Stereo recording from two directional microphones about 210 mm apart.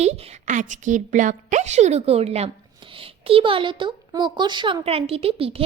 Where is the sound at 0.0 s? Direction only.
30° right (ahead or behind).